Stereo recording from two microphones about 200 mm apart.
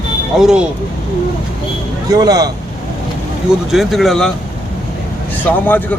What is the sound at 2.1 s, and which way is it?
Speech, 20° right (ahead or behind).